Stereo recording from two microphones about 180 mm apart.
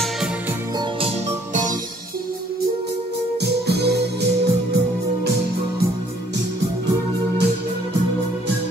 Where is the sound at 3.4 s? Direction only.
65° right (ahead or behind).